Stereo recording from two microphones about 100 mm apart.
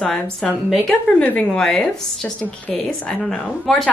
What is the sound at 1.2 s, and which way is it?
Speech, 15° left (ahead or behind).